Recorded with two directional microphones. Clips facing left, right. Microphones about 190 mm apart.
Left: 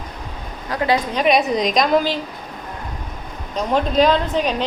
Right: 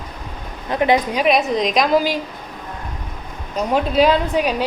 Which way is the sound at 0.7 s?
20° right (ahead or behind).